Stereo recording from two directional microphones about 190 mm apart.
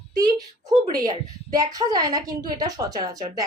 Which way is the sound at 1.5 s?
20° right (ahead or behind).